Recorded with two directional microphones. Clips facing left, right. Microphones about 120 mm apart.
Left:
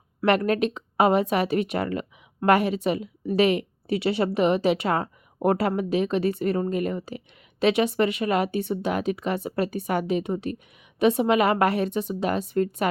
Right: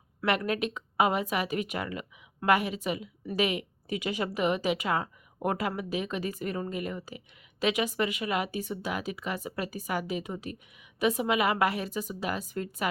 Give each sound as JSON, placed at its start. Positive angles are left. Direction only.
{"t": 0.2, "sound": "speech", "side_deg": 40}